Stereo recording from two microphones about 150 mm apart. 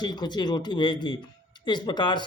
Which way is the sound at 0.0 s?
30° left (ahead or behind).